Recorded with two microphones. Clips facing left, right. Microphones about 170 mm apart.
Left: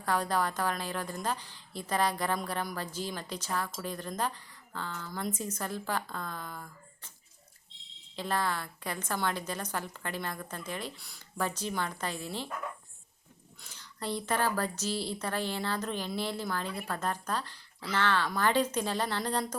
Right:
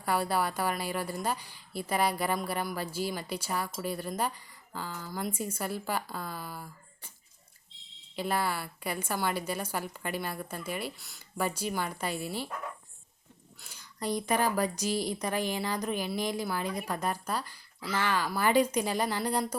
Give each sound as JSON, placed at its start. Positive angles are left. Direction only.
{"t": 0.0, "sound": "a woman's voice", "side_deg": -10}
{"t": 8.1, "sound": "a woman's voice", "side_deg": -10}
{"t": 13.6, "sound": "a woman's voice", "side_deg": -10}